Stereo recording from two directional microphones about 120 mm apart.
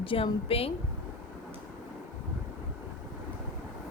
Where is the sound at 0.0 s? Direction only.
50° left (ahead or behind).